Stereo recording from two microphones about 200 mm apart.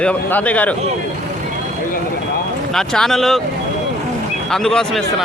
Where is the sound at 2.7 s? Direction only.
5° left (ahead or behind).